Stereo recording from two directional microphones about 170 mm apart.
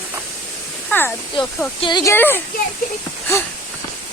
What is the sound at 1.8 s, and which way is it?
Speech, 25° left (ahead or behind).